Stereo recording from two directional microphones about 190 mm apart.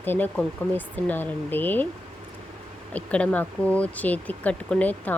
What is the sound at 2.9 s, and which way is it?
Speech, 5° left (ahead or behind).